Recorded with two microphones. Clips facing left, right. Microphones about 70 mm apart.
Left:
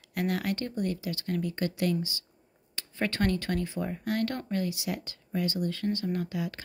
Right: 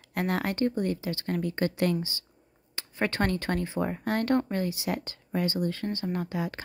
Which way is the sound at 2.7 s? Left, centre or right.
Right.